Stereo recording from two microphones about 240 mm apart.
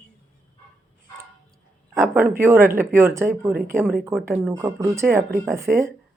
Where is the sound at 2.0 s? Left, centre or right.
Centre.